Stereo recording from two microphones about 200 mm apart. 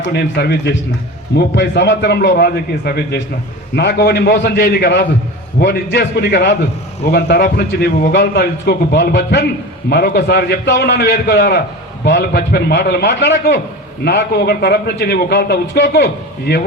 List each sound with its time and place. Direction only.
0.0 s a man's voice: 55° left (ahead or behind)